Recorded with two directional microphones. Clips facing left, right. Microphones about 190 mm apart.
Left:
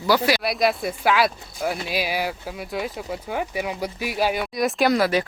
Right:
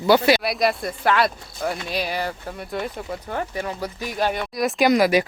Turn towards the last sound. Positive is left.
turn(degrees=-15)  # may be behind; listen again after turning